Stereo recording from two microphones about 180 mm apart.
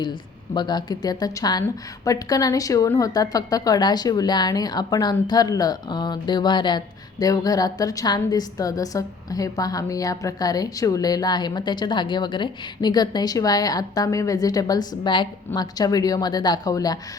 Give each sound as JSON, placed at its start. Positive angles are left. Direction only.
{"t": 0.0, "sound": "speech", "side_deg": 25}